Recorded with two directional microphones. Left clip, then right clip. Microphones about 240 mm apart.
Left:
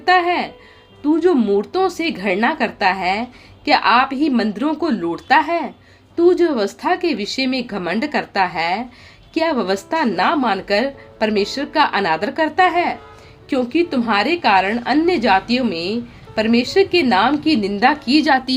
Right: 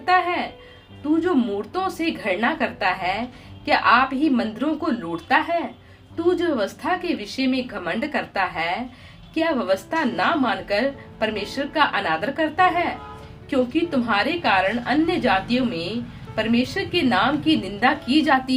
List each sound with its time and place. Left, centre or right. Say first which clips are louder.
0.0 s a woman's voice: left 5 dB; left
1.7 s a woman's voice: left 6 dB; left